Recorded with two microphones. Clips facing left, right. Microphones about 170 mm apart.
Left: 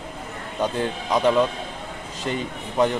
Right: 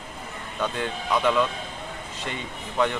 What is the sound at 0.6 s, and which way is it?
Speech, 35° left (ahead or behind).